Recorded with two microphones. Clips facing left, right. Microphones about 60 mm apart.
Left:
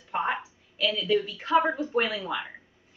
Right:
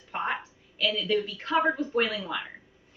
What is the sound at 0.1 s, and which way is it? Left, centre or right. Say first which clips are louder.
A woman's voice: left 2 dB; centre.